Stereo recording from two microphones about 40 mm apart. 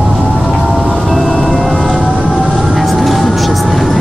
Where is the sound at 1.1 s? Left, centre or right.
Centre.